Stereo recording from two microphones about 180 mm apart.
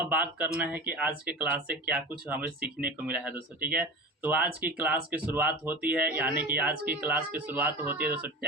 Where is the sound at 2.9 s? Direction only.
10° right (ahead or behind).